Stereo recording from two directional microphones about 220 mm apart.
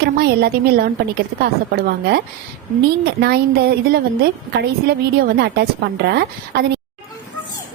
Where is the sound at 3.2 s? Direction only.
45° right (ahead or behind).